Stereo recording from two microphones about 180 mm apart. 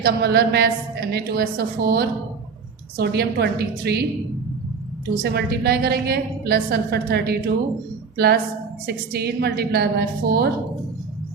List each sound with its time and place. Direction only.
0.0 s a woman's voice: 65° right (ahead or behind)
5.1 s a woman's voice: 60° right (ahead or behind)